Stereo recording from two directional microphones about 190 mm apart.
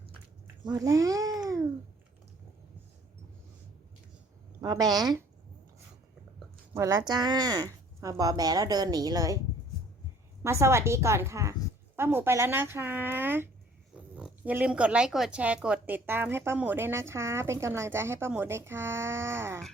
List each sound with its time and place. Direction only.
0.6 s a child's voice: 20° right (ahead or behind)
4.6 s speech: 20° right (ahead or behind)
6.7 s speech: 15° right (ahead or behind)
10.4 s speech: 15° right (ahead or behind)